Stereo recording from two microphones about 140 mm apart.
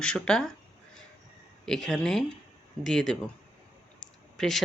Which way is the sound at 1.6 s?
5° left (ahead or behind).